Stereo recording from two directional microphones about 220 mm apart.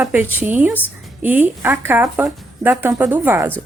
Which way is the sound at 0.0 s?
10° right (ahead or behind).